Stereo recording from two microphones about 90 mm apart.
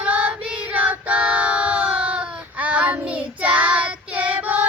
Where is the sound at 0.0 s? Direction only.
15° right (ahead or behind).